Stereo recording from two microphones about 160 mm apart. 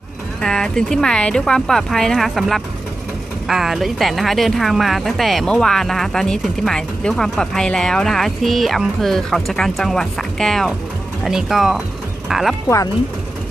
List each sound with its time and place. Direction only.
0.4 s speech: 5° left (ahead or behind)
12.6 s speech: 20° left (ahead or behind)